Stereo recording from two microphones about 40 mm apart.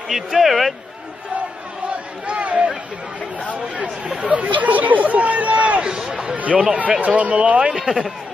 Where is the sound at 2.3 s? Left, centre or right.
Right.